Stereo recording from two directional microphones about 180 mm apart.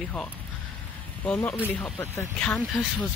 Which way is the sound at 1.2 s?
5° left (ahead or behind).